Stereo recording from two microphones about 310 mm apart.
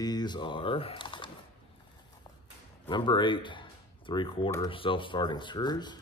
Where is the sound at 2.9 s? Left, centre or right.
Centre.